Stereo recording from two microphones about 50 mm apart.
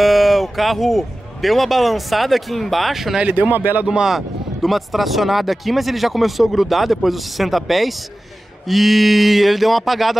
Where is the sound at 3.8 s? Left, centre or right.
Centre.